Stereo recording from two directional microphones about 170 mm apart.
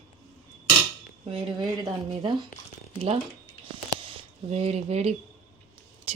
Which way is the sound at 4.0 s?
35° right (ahead or behind).